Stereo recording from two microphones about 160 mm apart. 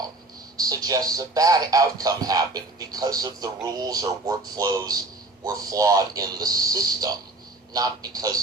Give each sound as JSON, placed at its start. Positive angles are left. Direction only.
{"t": 0.5, "sound": "speech", "side_deg": -25}